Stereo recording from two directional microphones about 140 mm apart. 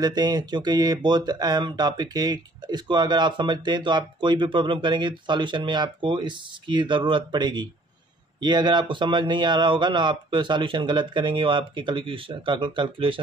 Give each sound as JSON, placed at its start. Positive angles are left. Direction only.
{"t": 0.0, "sound": "speech", "side_deg": -30}